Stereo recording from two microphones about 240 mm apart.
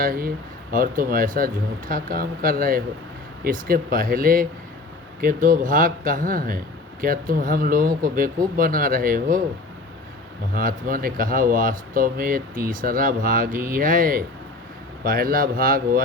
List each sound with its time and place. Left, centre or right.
0.0 s speech: right
10.5 s speech: right